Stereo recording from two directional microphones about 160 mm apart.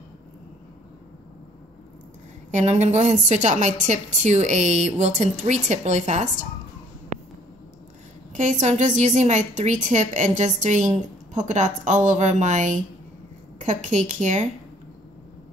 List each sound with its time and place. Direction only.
2.5 s a woman's voice: 45° right (ahead or behind)
7.1 s a sound: 45° right (ahead or behind)
8.4 s a woman's voice: 50° right (ahead or behind)